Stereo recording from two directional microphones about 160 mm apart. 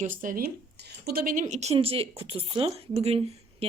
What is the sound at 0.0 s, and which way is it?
Speech, 55° right (ahead or behind).